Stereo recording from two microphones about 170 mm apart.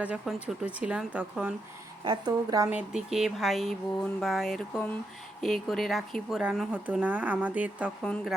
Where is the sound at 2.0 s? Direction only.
20° right (ahead or behind).